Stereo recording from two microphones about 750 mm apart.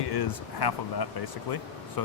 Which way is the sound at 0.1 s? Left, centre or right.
Left.